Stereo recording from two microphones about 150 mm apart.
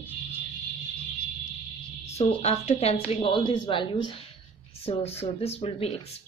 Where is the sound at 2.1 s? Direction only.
45° left (ahead or behind).